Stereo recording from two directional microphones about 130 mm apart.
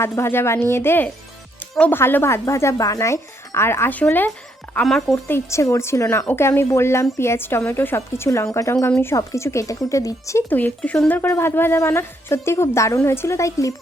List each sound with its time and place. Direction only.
0.0 s a woman's voice: 20° left (ahead or behind)
5.1 s speech: 20° left (ahead or behind)
10.5 s speech: 10° left (ahead or behind)